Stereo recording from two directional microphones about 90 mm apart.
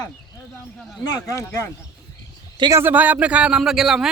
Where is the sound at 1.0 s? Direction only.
35° left (ahead or behind).